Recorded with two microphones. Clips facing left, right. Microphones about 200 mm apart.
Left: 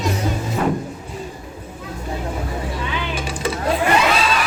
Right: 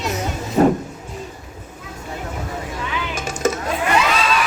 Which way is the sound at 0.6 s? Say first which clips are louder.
Right 7 dB; 40° right (ahead or behind).